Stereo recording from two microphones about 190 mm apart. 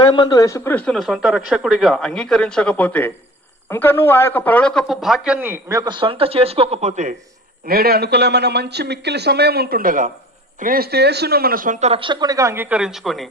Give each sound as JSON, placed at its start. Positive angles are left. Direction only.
{"t": 0.0, "sound": "a man's voice", "side_deg": 25}
{"t": 7.7, "sound": "speech", "side_deg": -55}